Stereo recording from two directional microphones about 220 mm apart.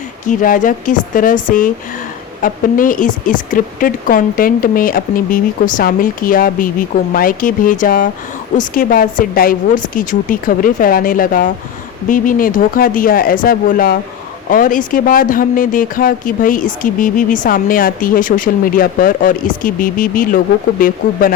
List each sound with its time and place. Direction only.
0.3 s speech: 35° left (ahead or behind)